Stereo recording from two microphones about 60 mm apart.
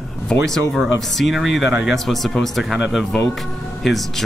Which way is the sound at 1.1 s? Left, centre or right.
Centre.